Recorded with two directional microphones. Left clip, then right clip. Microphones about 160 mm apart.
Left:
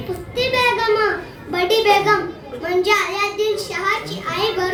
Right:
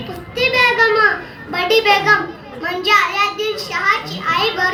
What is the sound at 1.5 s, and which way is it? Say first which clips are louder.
A child's voice: right 1 dB; 55° left (ahead or behind).